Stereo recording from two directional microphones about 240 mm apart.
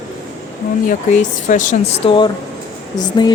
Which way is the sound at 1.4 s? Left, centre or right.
Left.